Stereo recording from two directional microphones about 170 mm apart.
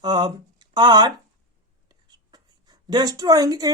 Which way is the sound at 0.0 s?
25° right (ahead or behind).